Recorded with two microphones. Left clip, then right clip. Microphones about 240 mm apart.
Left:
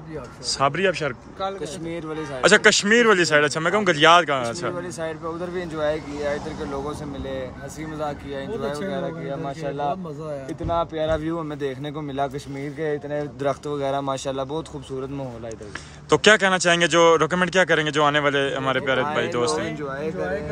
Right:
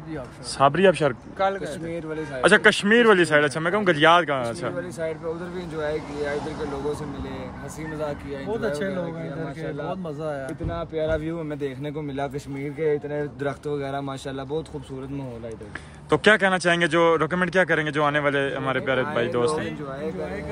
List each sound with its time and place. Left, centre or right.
0.5 s speech: centre
2.4 s speech: centre
10.7 s speech: centre
12.8 s speech: centre
16.1 s speech: centre
19.5 s speech: left